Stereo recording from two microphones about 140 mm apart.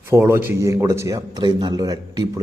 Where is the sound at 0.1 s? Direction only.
20° right (ahead or behind).